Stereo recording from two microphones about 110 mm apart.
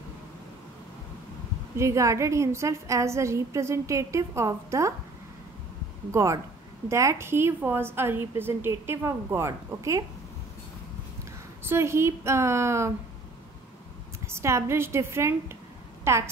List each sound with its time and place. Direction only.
1.8 s a woman's voice: 30° right (ahead or behind)
6.1 s a woman's voice: 30° right (ahead or behind)
11.7 s a woman's voice: 25° right (ahead or behind)
14.2 s a woman's voice: 25° right (ahead or behind)